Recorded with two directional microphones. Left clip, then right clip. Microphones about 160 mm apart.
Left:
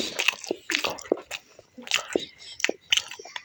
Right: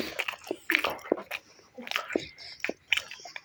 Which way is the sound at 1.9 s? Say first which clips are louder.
Left 5 dB; 25° left (ahead or behind).